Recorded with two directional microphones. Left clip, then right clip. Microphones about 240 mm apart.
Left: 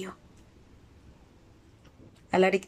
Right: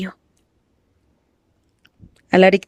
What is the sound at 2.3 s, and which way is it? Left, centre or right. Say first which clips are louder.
Speech: right 11 dB; right.